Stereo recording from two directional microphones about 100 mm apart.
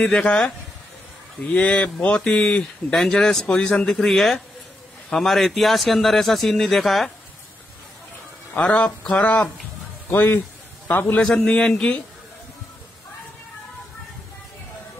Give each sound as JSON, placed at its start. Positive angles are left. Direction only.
{"t": 0.0, "sound": "speech", "side_deg": 10}
{"t": 1.5, "sound": "a man's voice", "side_deg": 10}
{"t": 8.5, "sound": "speech", "side_deg": 10}
{"t": 10.1, "sound": "a man's voice", "side_deg": 20}